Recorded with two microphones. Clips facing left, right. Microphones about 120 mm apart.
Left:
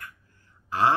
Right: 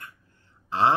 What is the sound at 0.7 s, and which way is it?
Throat clearing, 25° right (ahead or behind).